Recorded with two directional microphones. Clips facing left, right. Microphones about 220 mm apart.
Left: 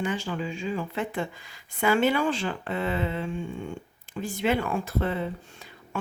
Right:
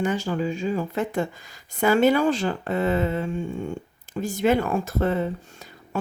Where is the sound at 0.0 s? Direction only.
45° right (ahead or behind).